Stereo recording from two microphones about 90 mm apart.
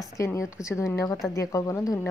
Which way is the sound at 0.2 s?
35° left (ahead or behind).